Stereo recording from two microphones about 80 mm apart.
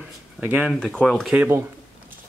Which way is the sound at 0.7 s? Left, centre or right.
Centre.